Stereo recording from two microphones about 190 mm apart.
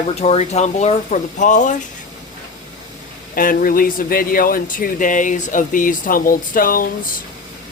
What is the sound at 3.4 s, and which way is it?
Speech, 45° left (ahead or behind).